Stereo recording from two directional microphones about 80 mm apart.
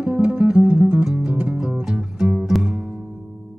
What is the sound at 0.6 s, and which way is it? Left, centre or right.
Music, right.